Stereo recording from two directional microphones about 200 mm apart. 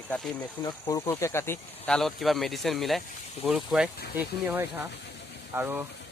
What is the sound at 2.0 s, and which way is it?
Speech, centre (ahead or behind).